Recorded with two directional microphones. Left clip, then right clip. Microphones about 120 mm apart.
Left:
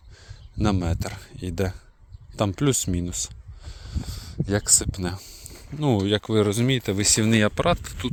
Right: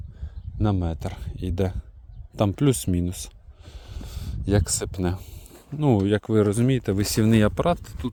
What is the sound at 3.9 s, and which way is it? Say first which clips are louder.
Speech: left 4 dB; 80° right.